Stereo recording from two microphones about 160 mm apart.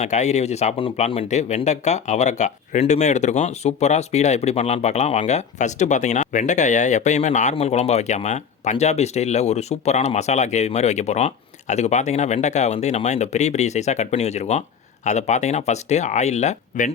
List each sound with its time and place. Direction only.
0.0 s speech: 45° left (ahead or behind)